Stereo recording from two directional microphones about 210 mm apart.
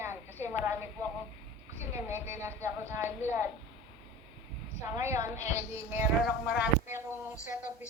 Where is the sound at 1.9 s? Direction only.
10° right (ahead or behind).